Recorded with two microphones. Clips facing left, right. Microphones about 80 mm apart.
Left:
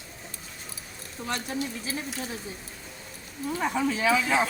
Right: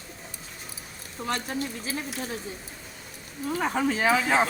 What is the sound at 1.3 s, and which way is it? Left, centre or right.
Speech, right.